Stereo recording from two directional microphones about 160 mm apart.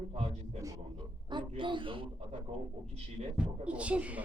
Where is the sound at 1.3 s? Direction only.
30° right (ahead or behind).